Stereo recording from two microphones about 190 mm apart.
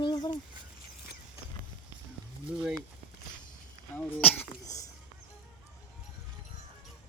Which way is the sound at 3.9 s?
10° left (ahead or behind).